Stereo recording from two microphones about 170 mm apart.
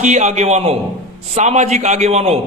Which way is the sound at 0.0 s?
45° right (ahead or behind).